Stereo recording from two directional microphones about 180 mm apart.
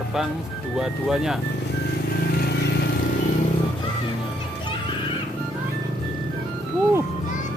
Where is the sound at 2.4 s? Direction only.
65° left (ahead or behind).